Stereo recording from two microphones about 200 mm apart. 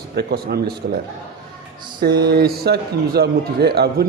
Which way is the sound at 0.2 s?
55° right (ahead or behind).